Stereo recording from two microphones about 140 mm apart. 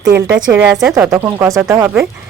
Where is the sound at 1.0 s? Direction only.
15° right (ahead or behind).